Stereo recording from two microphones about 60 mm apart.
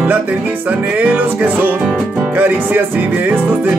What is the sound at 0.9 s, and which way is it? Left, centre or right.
Music, right.